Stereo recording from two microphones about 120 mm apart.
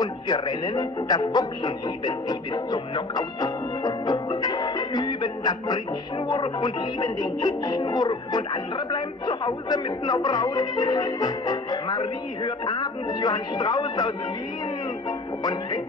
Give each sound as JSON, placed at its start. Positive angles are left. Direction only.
{"t": 0.0, "sound": "speech", "side_deg": 35}